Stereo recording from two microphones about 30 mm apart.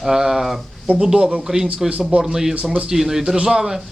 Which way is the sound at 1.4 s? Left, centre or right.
Centre.